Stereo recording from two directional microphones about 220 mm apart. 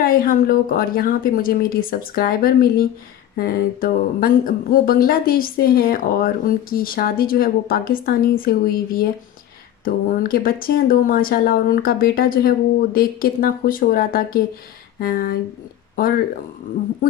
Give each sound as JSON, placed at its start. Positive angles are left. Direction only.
{"t": 0.0, "sound": "speech", "side_deg": 40}